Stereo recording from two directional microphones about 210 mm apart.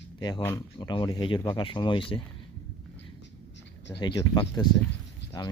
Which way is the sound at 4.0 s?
20° left (ahead or behind).